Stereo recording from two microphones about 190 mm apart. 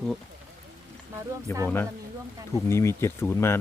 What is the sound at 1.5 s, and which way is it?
Speech, 10° left (ahead or behind).